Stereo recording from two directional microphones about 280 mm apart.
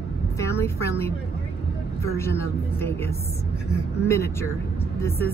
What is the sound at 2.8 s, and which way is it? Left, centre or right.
A woman's voice, centre.